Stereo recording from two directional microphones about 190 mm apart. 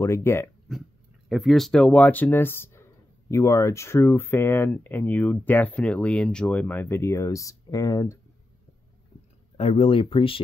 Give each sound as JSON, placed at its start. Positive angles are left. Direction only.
{"t": 0.0, "sound": "speech", "side_deg": 15}
{"t": 1.3, "sound": "speech", "side_deg": 0}
{"t": 9.6, "sound": "speech", "side_deg": 30}